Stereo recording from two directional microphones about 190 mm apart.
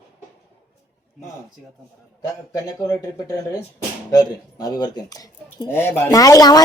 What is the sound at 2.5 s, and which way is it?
Speech, 20° left (ahead or behind).